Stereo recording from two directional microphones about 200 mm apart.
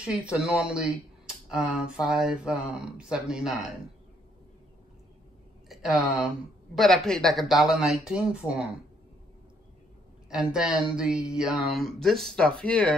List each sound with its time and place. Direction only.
0.0 s speech: 5° right (ahead or behind)
5.7 s a sound: centre (ahead or behind)
6.7 s speech: centre (ahead or behind)
10.3 s speech: 5° right (ahead or behind)